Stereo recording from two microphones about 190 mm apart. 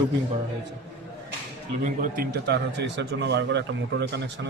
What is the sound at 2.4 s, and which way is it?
A man's voice, 65° right (ahead or behind).